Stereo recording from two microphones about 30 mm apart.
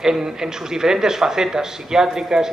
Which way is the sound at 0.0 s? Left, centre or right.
Centre.